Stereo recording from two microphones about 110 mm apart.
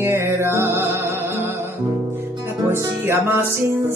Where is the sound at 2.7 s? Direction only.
25° right (ahead or behind).